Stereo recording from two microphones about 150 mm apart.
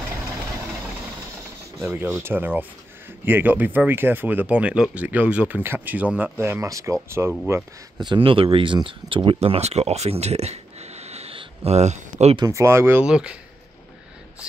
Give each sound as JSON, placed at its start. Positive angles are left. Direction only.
{"t": 1.8, "sound": "speech", "side_deg": -15}
{"t": 8.0, "sound": "speech", "side_deg": -35}
{"t": 12.4, "sound": "speech", "side_deg": -20}